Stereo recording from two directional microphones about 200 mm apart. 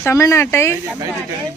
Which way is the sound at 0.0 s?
15° left (ahead or behind).